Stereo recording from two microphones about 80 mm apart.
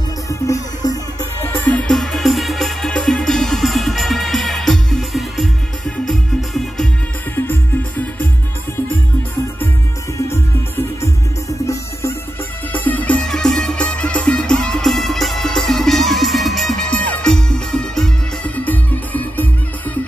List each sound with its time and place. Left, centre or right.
0.3 s music: left
1.5 s music: centre
1.9 s music: centre
7.3 s music: left
11.0 s music: left
12.7 s music: left
13.2 s music: centre
16.9 s music: centre
18.4 s music: left